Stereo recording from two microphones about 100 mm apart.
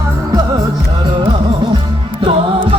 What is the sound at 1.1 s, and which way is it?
Music, 55° right (ahead or behind).